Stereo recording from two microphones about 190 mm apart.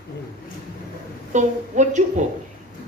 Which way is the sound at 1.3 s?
40° right (ahead or behind).